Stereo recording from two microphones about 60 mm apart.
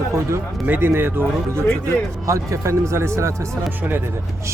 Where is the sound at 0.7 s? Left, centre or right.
Right.